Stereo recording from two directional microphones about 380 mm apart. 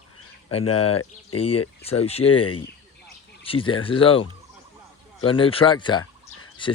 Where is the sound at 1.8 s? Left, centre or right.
Centre.